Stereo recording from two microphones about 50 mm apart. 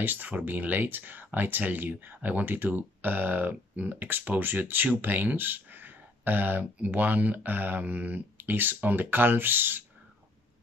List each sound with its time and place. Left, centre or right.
0.0 s speech: right